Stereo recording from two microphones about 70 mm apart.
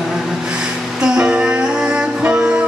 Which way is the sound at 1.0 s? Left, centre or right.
Centre.